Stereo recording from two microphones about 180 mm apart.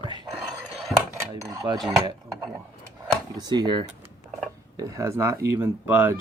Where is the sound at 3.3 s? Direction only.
25° right (ahead or behind).